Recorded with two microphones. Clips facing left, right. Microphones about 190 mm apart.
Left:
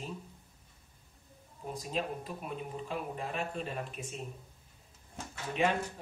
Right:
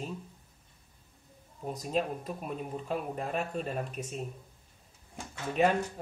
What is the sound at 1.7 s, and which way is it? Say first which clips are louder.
Speech: right 4 dB; 45° right (ahead or behind).